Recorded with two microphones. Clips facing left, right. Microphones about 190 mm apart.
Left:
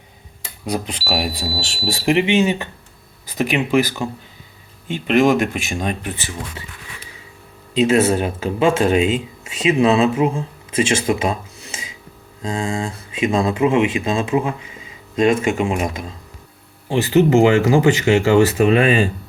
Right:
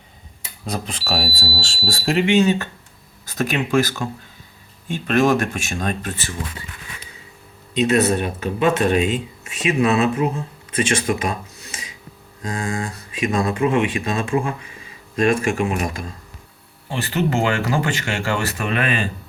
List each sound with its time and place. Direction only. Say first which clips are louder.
0.6 s speech: left 4 dB; 15° left (ahead or behind)
7.7 s speech: left 2 dB; 25° left (ahead or behind)
17.2 s speech: left 8 dB; 20° left (ahead or behind)